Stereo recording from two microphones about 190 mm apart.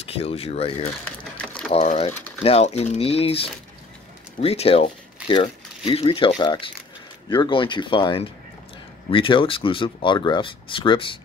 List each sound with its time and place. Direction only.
0.2 s speech: 30° left (ahead or behind)
1.4 s a sound: 5° left (ahead or behind)
1.7 s speech: 35° left (ahead or behind)